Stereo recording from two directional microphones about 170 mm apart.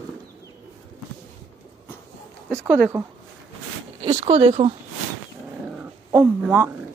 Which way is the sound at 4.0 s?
35° right (ahead or behind).